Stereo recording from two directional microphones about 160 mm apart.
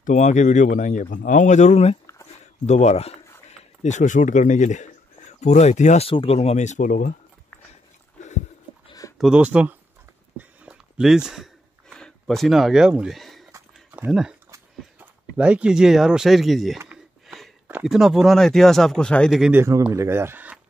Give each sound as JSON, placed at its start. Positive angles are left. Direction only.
{"t": 0.0, "sound": "speech", "side_deg": 50}
{"t": 9.2, "sound": "speech", "side_deg": -5}
{"t": 10.6, "sound": "a sound", "side_deg": -5}
{"t": 13.5, "sound": "dog", "side_deg": -10}
{"t": 14.5, "sound": "speech", "side_deg": -10}
{"t": 17.3, "sound": "a sound", "side_deg": 0}
{"t": 17.8, "sound": "speech", "side_deg": 0}
{"t": 19.5, "sound": "speech", "side_deg": -15}